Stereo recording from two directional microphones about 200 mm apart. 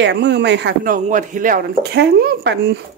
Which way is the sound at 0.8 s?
40° right (ahead or behind).